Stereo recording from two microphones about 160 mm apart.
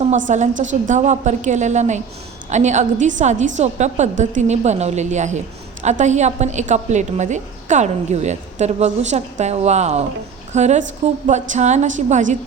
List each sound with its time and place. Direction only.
0.0 s a woman's voice: 45° right (ahead or behind)